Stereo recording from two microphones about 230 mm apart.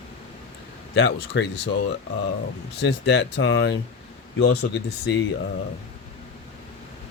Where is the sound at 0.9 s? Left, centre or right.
Left.